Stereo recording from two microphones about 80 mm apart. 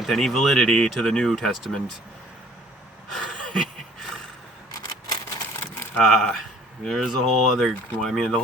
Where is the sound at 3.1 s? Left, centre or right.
Centre.